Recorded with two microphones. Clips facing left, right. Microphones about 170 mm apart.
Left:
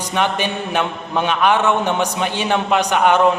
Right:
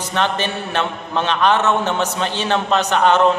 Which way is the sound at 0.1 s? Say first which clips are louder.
Left 1 dB; 10° left (ahead or behind).